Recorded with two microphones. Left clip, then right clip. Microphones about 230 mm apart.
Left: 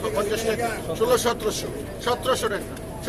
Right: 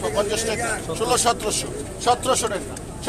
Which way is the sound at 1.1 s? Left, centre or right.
Right.